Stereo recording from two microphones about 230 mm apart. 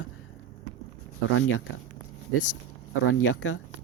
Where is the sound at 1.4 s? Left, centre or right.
Left.